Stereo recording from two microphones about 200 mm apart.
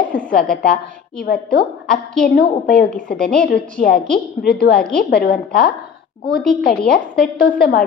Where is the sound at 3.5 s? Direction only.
50° left (ahead or behind).